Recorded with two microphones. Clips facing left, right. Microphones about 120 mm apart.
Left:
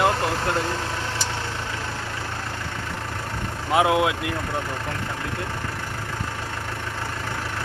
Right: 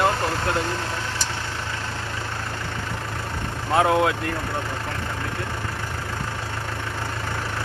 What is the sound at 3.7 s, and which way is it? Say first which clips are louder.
Speech: even; 10° left (ahead or behind).